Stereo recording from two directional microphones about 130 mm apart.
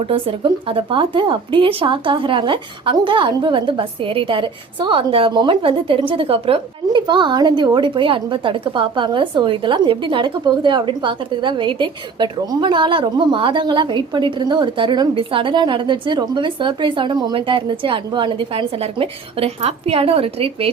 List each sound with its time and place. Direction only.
0.0 s speech: 45° right (ahead or behind)